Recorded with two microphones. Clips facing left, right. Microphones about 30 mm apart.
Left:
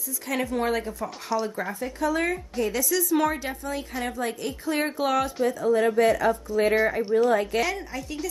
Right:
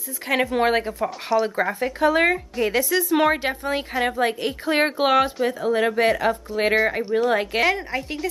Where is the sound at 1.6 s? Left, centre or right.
Right.